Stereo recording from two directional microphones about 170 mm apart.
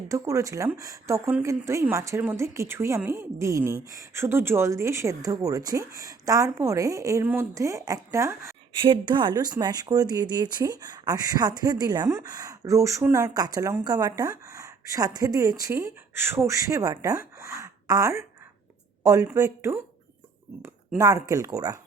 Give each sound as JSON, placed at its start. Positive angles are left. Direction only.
{"t": 0.1, "sound": "a woman's voice", "side_deg": -20}
{"t": 8.8, "sound": "a woman's voice", "side_deg": -30}